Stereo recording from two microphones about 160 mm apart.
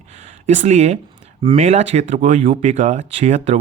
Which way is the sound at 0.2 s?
45° right (ahead or behind).